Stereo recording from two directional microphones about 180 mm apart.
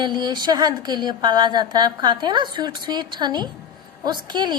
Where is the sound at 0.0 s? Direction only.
25° right (ahead or behind).